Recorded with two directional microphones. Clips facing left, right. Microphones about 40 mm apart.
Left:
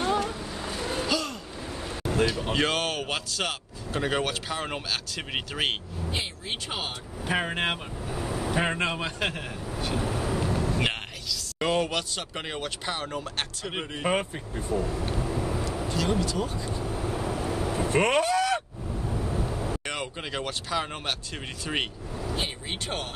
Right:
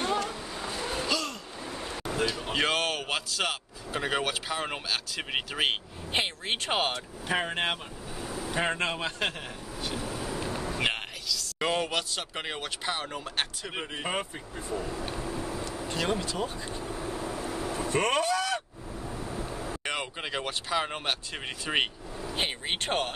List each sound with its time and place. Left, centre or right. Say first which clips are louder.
0.0 s a sound: left 3 dB; centre
2.5 s speech: left 1 dB; centre
6.1 s speech: right 5 dB; right
7.2 s speech: left 2 dB; centre
8.1 s vehicle: left 5 dB; left
8.5 s speech: left 1 dB; centre
9.9 s vehicle: left 6 dB; left
10.8 s a man's voice: left 1 dB; centre
15.1 s vehicle: left 4 dB; left
16.1 s speech: left 3 dB; centre
16.8 s vehicle: left 4 dB; left
19.8 s speech: even; centre
22.3 s speech: right 2 dB; right